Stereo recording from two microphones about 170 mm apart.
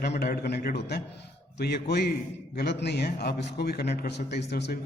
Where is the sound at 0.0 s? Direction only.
70° left (ahead or behind).